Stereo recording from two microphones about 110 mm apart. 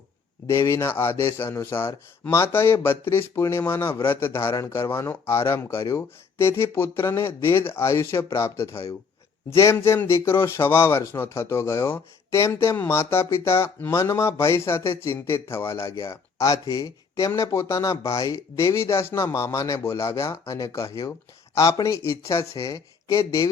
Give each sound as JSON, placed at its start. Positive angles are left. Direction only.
{"t": 0.4, "sound": "speech", "side_deg": 25}